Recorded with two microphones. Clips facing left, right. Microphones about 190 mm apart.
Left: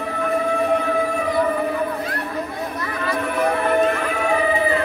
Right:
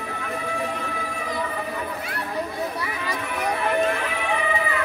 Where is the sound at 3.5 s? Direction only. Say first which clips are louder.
Left 3 dB; 45° left (ahead or behind).